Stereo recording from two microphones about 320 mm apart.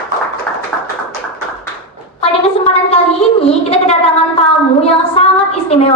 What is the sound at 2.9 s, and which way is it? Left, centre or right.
A woman's voice, centre.